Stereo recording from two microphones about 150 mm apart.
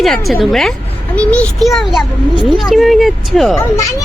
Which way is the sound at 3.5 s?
20° left (ahead or behind).